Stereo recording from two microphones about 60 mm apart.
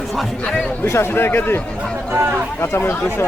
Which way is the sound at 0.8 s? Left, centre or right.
Left.